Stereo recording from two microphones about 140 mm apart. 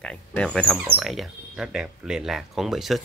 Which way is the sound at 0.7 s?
5° right (ahead or behind).